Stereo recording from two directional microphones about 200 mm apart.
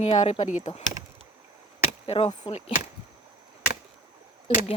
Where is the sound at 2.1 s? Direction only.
25° left (ahead or behind).